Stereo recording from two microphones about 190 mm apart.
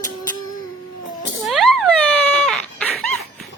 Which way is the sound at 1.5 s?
Centre (ahead or behind).